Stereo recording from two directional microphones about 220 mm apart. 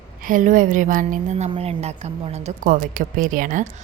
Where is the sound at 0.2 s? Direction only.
40° right (ahead or behind).